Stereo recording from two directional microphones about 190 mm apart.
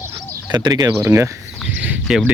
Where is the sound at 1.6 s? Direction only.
5° right (ahead or behind).